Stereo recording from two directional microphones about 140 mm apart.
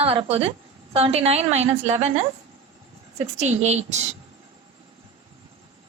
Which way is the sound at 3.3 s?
55° right (ahead or behind).